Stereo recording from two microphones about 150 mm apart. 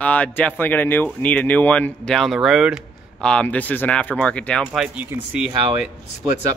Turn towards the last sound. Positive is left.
turn(degrees=-10)  # may be behind; listen again after turning